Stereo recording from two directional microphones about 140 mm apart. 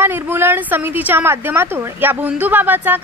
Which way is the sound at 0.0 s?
15° right (ahead or behind).